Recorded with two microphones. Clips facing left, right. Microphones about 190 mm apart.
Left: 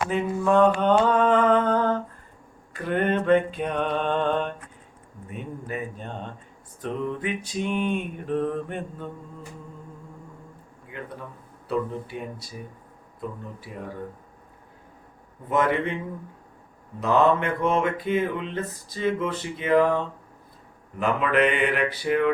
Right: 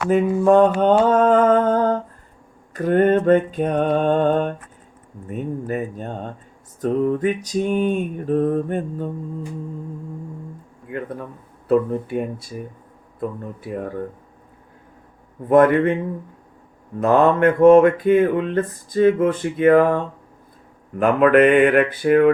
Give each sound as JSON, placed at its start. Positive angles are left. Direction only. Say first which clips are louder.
{"t": 0.1, "sound": "mantra", "louder": "right 9 dB", "side_deg": -45}
{"t": 10.9, "sound": "a man's voice", "louder": "right 9 dB", "side_deg": -55}
{"t": 11.7, "sound": "mantra", "louder": "right 9 dB", "side_deg": -50}
{"t": 15.4, "sound": "mantra", "louder": "right 10 dB", "side_deg": -50}
{"t": 17.0, "sound": "mantra", "louder": "right 6 dB", "side_deg": -50}
{"t": 21.0, "sound": "mantra", "louder": "right 9 dB", "side_deg": -55}